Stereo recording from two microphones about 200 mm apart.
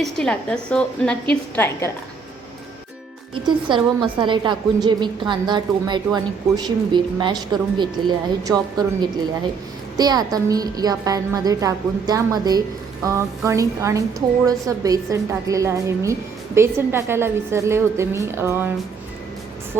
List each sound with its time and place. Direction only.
0.0 s a woman's voice: 5° left (ahead or behind)
3.3 s a woman's voice: 25° right (ahead or behind)